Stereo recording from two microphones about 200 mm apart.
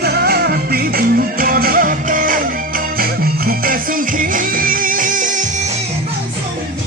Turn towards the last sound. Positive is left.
turn(degrees=-40)  # may be behind; listen again after turning